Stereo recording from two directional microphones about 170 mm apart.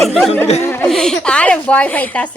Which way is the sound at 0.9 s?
5° left (ahead or behind).